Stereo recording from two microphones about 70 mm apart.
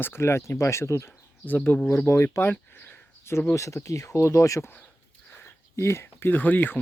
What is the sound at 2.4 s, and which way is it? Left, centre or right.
Speech, left.